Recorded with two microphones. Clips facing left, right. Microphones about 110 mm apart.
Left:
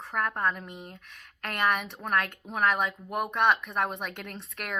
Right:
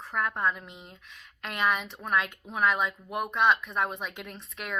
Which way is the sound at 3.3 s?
60° left (ahead or behind).